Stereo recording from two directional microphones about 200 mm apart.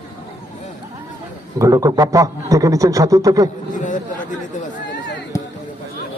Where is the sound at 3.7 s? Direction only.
40° left (ahead or behind).